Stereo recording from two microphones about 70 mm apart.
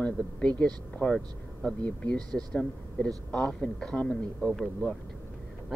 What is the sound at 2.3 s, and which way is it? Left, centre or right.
Speech, centre.